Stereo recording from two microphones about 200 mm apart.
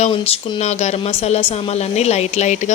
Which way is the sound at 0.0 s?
30° left (ahead or behind).